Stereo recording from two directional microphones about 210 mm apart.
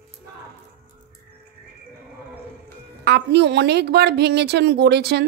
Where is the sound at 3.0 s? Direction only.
55° right (ahead or behind).